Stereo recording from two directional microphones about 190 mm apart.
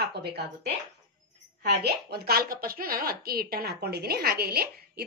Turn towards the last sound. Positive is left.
turn(degrees=-55)  # may be behind; listen again after turning